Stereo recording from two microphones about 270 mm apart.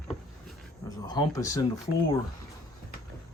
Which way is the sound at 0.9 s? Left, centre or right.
Centre.